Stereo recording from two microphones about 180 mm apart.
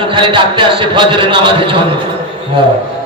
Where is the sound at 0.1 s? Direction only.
25° right (ahead or behind).